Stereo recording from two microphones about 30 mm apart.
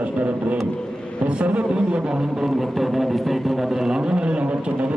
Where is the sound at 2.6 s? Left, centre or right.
Centre.